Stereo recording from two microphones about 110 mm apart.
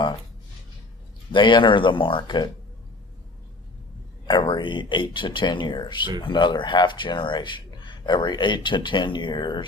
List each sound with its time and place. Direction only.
1.3 s speech: 45° left (ahead or behind)
4.3 s speech: 45° left (ahead or behind)